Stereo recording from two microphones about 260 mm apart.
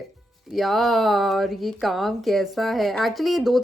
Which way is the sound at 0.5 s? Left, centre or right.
Centre.